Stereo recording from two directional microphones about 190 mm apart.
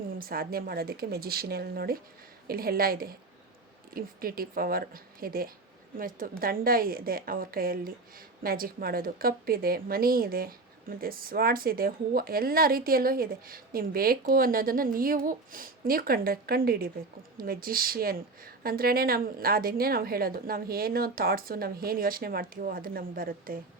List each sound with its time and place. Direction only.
0.1 s a woman's voice: 50° right (ahead or behind)